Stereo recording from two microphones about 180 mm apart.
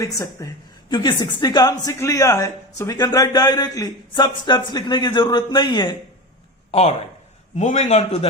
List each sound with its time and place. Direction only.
0.0 s speech: 20° left (ahead or behind)
6.7 s a man's voice: 35° left (ahead or behind)